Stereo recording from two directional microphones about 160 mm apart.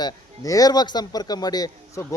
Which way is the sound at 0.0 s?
20° left (ahead or behind).